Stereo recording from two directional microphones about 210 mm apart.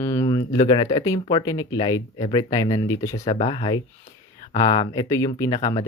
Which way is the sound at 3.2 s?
30° left (ahead or behind).